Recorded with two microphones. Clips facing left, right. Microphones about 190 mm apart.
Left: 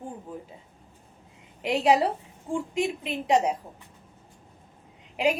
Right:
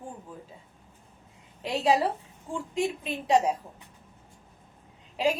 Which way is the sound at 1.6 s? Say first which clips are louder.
Left 3 dB; 20° left (ahead or behind).